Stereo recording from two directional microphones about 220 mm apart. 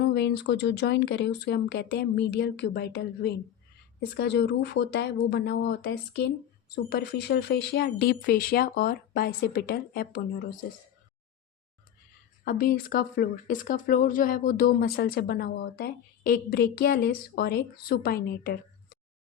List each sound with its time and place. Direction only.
0.0 s speech: 50° left (ahead or behind)
12.5 s speech: 40° left (ahead or behind)